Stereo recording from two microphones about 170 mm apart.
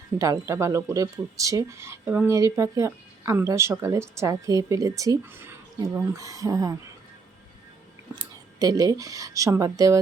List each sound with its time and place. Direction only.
0.2 s speech: 20° right (ahead or behind)
8.2 s speech: 20° right (ahead or behind)